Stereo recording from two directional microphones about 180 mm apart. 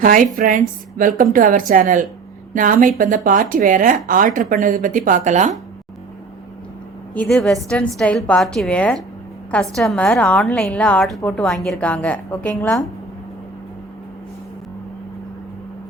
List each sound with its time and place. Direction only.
0.0 s speech: 50° right (ahead or behind)
7.1 s a woman's voice: 5° left (ahead or behind)